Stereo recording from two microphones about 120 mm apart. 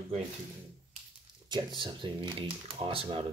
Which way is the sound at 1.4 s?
40° right (ahead or behind).